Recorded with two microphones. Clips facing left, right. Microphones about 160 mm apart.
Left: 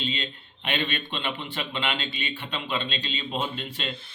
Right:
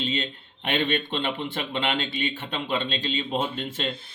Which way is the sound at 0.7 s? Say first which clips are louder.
Right 4 dB; 25° right (ahead or behind).